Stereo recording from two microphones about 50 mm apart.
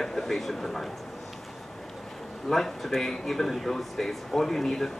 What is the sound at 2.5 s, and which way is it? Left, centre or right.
Speech, centre.